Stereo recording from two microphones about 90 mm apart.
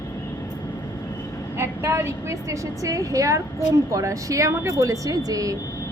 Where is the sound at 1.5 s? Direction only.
30° right (ahead or behind).